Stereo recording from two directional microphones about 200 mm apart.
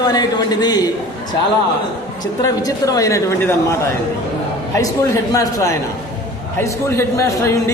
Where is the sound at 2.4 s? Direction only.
15° left (ahead or behind).